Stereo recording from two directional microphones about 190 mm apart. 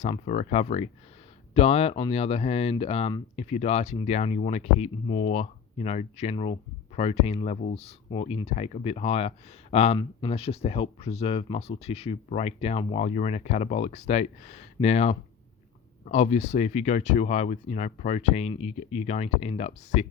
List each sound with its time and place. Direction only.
0.0 s speech: 40° left (ahead or behind)